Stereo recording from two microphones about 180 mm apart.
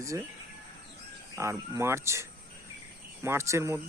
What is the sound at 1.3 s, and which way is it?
Speech, 15° right (ahead or behind).